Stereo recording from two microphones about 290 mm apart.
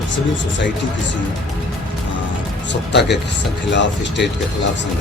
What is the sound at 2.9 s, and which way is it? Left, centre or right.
Speech, left.